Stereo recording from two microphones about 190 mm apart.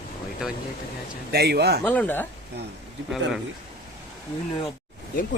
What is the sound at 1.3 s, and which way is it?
Speech, 60° right (ahead or behind).